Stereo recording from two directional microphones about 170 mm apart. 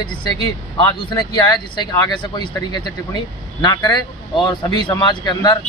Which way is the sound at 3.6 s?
25° left (ahead or behind).